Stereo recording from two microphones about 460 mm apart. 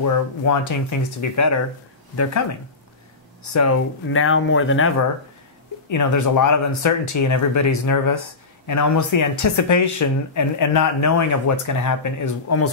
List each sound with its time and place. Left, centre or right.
0.0 s speech: left
3.4 s speech: left
5.9 s speech: left